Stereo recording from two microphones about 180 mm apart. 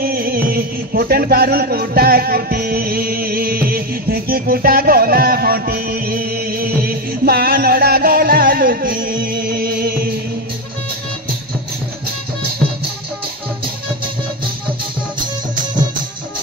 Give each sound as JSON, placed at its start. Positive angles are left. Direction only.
{"t": 0.0, "sound": "music", "side_deg": -55}